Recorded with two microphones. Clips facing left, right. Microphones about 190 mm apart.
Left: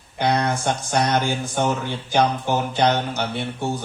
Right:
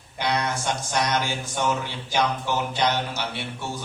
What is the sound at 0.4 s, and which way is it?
A man's voice, 55° left (ahead or behind).